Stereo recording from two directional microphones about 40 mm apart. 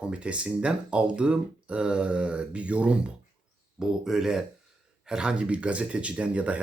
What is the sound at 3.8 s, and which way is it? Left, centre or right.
Speech, centre.